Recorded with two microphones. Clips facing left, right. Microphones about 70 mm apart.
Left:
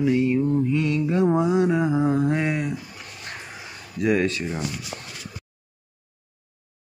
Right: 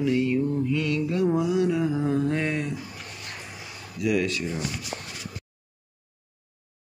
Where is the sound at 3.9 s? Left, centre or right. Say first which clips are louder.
Left 3 dB; left.